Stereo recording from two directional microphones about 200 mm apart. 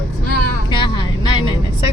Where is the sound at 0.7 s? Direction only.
25° left (ahead or behind).